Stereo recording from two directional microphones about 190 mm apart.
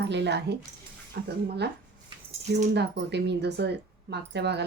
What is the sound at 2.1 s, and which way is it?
Cutlery, 25° right (ahead or behind).